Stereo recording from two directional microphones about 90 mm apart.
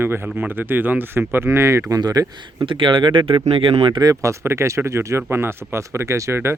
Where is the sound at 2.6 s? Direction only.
70° right (ahead or behind).